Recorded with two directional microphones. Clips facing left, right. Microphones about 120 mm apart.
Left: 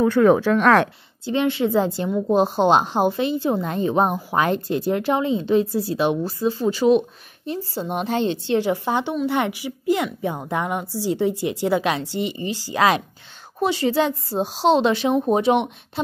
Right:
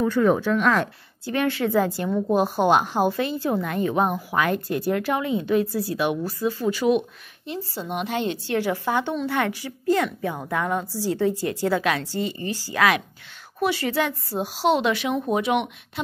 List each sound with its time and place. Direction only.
0.0 s speech: 65° left (ahead or behind)
1.2 s a woman's voice: 20° left (ahead or behind)
2.0 s a woman's voice: 10° left (ahead or behind)
2.3 s a woman's voice: 25° left (ahead or behind)